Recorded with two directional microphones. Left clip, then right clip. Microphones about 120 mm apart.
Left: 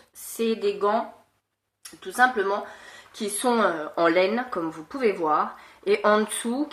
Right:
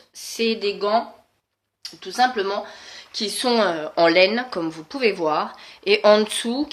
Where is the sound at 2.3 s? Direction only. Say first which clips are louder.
Right 1 dB; centre (ahead or behind).